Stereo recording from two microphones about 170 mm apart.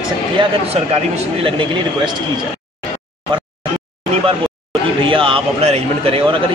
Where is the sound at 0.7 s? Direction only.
35° right (ahead or behind).